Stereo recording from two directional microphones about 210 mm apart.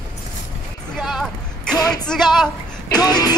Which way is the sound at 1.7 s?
20° left (ahead or behind).